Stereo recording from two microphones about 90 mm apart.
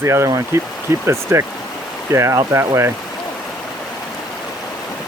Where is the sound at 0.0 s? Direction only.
30° right (ahead or behind).